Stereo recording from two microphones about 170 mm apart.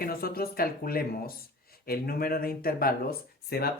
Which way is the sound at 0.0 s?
60° left (ahead or behind).